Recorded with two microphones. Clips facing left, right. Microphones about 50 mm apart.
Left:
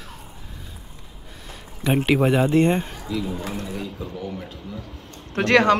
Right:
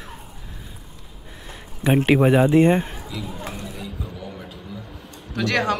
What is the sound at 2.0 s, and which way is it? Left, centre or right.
Speech, centre.